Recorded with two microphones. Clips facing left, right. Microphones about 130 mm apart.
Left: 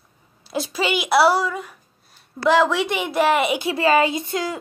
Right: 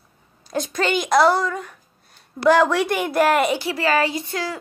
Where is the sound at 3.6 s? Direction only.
25° left (ahead or behind).